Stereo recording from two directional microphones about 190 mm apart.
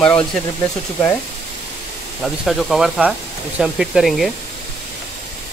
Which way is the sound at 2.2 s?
Centre (ahead or behind).